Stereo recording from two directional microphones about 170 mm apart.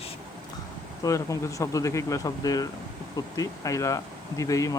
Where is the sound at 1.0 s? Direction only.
20° left (ahead or behind).